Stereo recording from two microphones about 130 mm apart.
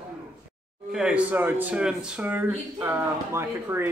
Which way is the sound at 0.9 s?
5° right (ahead or behind).